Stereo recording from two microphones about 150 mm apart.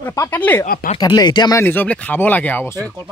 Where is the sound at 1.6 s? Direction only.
15° left (ahead or behind).